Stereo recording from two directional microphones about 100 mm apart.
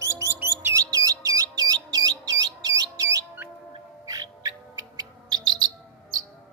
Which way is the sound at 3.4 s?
25° right (ahead or behind).